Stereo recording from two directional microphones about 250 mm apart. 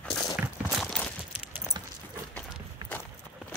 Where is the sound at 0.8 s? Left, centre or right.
Centre.